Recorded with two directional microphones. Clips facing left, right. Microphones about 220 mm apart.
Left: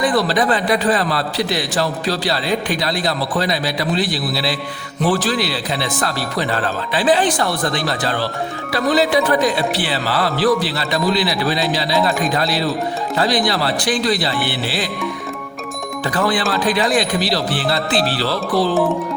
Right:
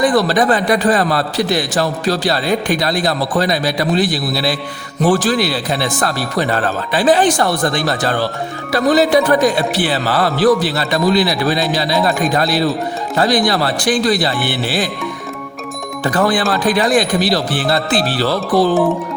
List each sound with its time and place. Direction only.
0.0 s a man's voice: 45° right (ahead or behind)
16.0 s a man's voice: 45° right (ahead or behind)